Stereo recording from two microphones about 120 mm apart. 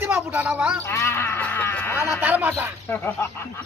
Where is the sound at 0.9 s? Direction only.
20° left (ahead or behind).